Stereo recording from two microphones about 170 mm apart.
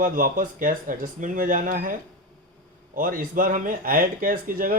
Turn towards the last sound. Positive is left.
turn(degrees=-55)  # may be behind; listen again after turning